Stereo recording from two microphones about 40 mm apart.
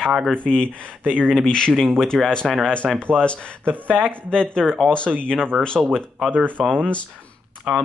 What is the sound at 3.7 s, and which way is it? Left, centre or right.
Speech, right.